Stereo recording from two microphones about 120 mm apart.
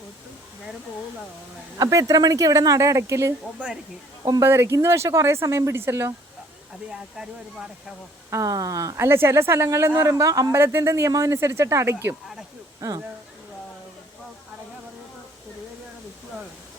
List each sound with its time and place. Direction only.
1.8 s speech: 30° right (ahead or behind)
8.3 s speech: 30° right (ahead or behind)